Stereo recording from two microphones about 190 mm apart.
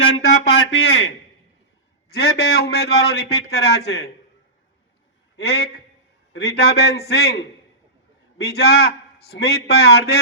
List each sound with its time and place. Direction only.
0.4 s a sound: 65° left (ahead or behind)
2.1 s a man's voice: 55° left (ahead or behind)
5.4 s a man's voice: 60° left (ahead or behind)